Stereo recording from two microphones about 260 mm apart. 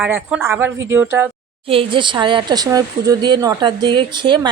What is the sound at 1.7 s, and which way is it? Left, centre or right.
Speech, centre.